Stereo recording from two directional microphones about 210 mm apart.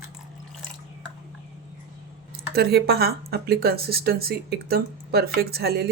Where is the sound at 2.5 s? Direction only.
50° right (ahead or behind).